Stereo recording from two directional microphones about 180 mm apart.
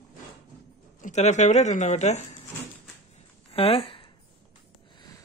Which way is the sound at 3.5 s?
30° left (ahead or behind).